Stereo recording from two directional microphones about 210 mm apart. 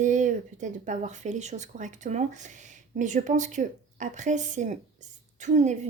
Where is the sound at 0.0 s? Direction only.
35° right (ahead or behind).